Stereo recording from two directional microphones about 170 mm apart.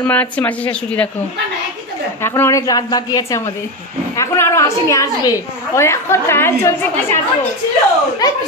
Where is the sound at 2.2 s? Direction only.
15° left (ahead or behind).